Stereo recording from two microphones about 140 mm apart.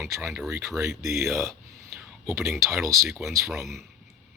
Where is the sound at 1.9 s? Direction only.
15° right (ahead or behind).